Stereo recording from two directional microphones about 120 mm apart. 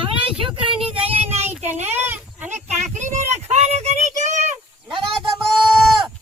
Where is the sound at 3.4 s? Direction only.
65° right (ahead or behind).